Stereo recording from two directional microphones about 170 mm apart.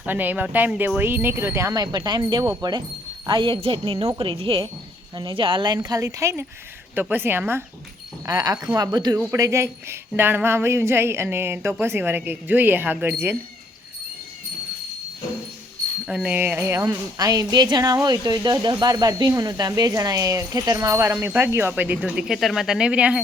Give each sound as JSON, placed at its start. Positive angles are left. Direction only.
{"t": 0.0, "sound": "speech", "side_deg": -10}
{"t": 16.0, "sound": "speech", "side_deg": -5}